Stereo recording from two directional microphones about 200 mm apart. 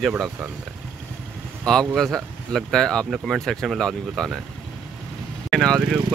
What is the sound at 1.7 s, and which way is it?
Speech, centre (ahead or behind).